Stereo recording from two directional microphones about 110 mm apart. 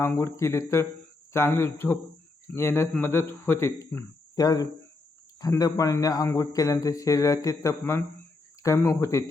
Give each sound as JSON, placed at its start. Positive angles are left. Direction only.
{"t": 0.0, "sound": "speech", "side_deg": 25}